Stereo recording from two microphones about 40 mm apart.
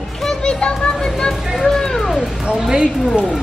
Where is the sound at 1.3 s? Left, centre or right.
Centre.